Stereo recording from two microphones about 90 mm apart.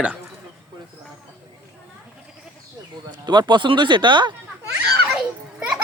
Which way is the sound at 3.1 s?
55° right (ahead or behind).